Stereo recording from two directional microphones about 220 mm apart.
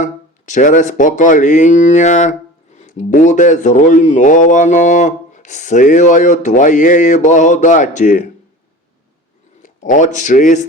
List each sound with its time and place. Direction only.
0.0 s speech: 35° left (ahead or behind)
9.6 s speech: 35° left (ahead or behind)